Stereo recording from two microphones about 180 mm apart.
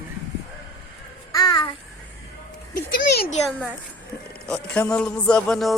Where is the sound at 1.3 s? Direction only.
20° left (ahead or behind).